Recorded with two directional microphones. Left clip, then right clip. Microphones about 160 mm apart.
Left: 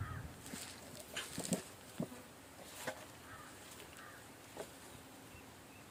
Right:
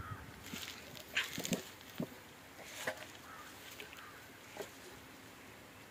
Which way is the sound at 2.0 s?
60° right (ahead or behind).